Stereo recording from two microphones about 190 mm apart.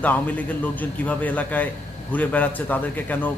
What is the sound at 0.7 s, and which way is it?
A man's voice, 10° left (ahead or behind).